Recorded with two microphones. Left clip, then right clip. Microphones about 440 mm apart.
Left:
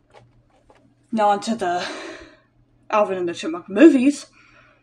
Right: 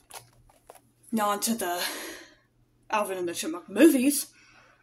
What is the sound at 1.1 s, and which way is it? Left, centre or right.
Speech, right.